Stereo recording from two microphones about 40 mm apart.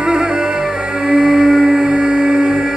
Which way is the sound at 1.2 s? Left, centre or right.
Centre.